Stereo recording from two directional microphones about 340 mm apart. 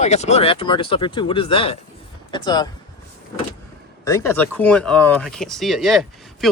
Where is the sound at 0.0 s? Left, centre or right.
Centre.